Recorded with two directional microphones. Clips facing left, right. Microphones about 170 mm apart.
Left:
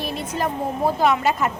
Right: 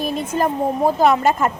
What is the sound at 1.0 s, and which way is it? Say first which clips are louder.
Speech: right 3 dB; 45° right (ahead or behind).